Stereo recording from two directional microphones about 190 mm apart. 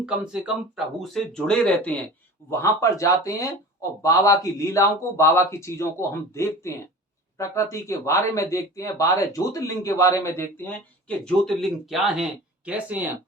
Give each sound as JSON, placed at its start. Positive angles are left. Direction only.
{"t": 0.0, "sound": "speech", "side_deg": -5}
{"t": 11.3, "sound": "speech", "side_deg": 0}